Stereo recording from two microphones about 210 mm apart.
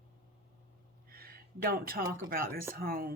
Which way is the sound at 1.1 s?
45° right (ahead or behind).